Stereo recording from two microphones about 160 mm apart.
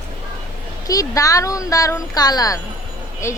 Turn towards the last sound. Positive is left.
turn(degrees=15)  # may be behind; listen again after turning